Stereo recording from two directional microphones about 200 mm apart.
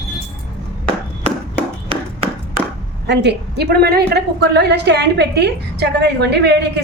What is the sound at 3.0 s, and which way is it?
A woman's voice, 60° right (ahead or behind).